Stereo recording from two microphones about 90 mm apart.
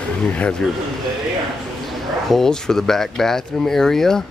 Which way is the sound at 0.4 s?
10° left (ahead or behind).